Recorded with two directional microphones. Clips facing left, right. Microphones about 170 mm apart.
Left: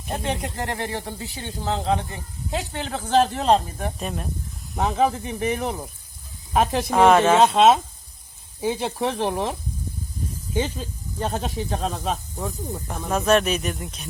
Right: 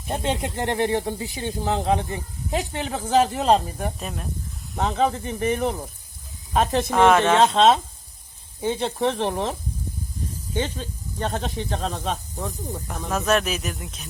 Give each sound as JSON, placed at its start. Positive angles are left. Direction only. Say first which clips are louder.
{"t": 0.1, "sound": "speech", "louder": "right 2 dB", "side_deg": -20}